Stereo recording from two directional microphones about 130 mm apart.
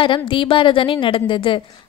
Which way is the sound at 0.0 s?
40° left (ahead or behind).